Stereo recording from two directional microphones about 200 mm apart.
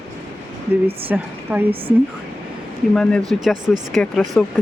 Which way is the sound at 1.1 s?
10° right (ahead or behind).